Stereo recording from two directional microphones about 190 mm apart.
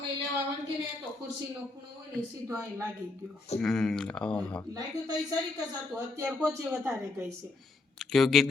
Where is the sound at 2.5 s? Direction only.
10° right (ahead or behind).